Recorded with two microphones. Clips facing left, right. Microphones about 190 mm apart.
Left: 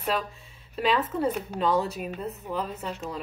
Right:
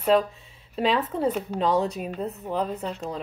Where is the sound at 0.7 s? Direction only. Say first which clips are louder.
Right 2 dB; 30° right (ahead or behind).